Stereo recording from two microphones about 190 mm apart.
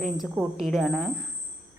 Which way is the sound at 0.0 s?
Centre (ahead or behind).